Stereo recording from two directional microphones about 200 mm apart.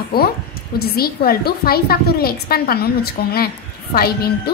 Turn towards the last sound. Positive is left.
turn(degrees=50)  # may be behind; listen again after turning